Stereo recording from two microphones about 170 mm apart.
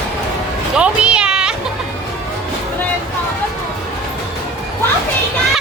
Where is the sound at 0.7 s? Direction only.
5° right (ahead or behind).